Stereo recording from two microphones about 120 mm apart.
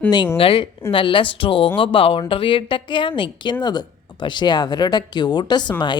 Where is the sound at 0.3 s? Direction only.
50° left (ahead or behind).